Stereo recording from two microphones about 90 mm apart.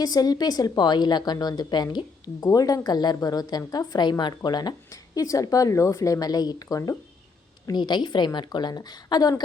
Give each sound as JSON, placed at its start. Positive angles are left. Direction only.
{"t": 0.0, "sound": "a woman's voice", "side_deg": 45}
{"t": 2.4, "sound": "a woman's voice", "side_deg": 40}
{"t": 7.7, "sound": "a woman's voice", "side_deg": 55}